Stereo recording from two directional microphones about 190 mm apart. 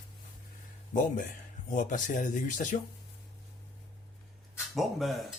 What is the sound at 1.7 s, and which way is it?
Speech, 40° left (ahead or behind).